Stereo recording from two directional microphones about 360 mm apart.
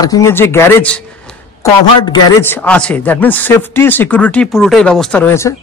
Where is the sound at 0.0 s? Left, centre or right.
Centre.